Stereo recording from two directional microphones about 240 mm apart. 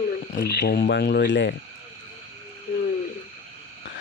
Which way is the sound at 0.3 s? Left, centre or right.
Left.